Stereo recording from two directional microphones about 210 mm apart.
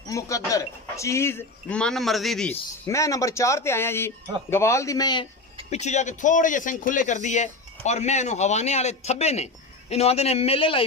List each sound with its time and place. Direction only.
0.1 s speech: 15° left (ahead or behind)
2.9 s speech: 15° left (ahead or behind)
5.7 s a man's voice: 35° left (ahead or behind)